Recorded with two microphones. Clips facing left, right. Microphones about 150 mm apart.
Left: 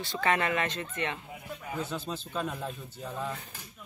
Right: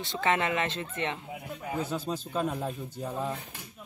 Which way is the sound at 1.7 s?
10° right (ahead or behind).